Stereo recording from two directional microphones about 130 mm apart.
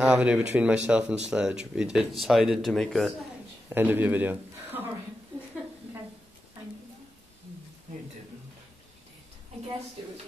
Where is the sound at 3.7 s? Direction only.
15° right (ahead or behind).